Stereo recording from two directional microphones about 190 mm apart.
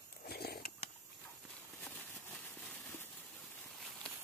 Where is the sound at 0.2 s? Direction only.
55° left (ahead or behind).